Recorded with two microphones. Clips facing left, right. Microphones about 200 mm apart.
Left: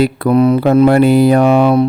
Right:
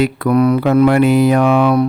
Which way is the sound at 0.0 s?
30° left (ahead or behind).